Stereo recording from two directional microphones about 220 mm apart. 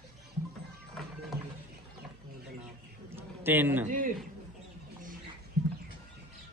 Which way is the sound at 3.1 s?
10° right (ahead or behind).